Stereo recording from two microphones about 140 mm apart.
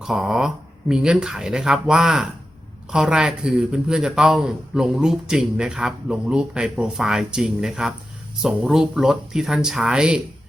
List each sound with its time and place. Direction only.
0.0 s a man's voice: 5° right (ahead or behind)